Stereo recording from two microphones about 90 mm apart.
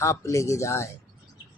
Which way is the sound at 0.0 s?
35° left (ahead or behind).